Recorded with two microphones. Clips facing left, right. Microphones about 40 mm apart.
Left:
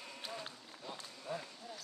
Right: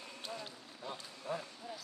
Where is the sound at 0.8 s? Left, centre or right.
Centre.